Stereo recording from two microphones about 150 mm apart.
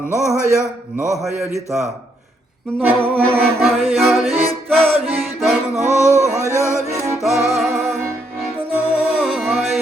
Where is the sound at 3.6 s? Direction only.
Centre (ahead or behind).